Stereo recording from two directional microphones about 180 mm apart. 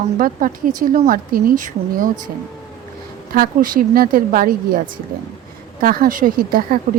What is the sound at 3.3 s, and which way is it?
Speech, 50° right (ahead or behind).